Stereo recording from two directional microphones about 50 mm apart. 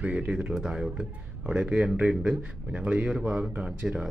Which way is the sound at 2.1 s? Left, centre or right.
Centre.